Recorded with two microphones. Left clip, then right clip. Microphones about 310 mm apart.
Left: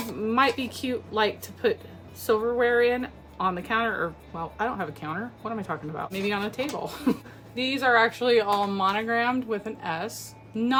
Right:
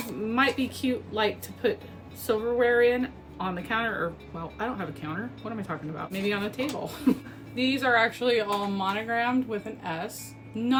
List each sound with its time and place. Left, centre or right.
0.3 s speech: centre